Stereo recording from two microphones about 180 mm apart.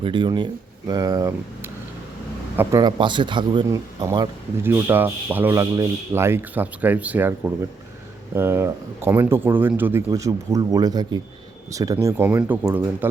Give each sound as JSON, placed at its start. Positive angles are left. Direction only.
{"t": 0.0, "sound": "speech", "side_deg": -25}
{"t": 4.6, "sound": "speech", "side_deg": -10}